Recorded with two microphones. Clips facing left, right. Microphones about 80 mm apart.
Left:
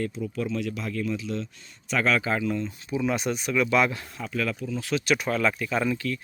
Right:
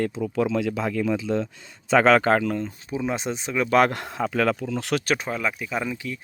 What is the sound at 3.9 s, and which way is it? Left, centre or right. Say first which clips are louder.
Speech: right 7 dB; right.